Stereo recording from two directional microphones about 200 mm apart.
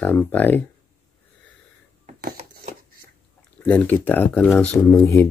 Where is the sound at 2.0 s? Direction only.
45° right (ahead or behind).